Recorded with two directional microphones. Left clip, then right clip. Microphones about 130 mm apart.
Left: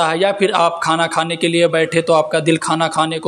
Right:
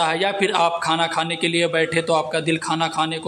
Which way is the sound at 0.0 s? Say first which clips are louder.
Left 5 dB; 25° left (ahead or behind).